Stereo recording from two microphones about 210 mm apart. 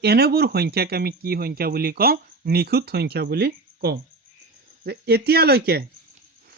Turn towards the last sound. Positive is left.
turn(degrees=-50)  # may be behind; listen again after turning